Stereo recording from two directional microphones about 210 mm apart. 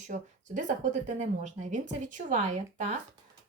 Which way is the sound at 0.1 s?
35° right (ahead or behind).